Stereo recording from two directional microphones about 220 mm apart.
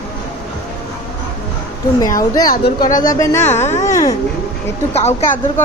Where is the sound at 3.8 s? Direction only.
15° left (ahead or behind).